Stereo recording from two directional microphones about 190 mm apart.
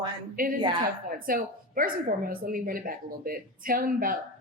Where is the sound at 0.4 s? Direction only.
50° right (ahead or behind).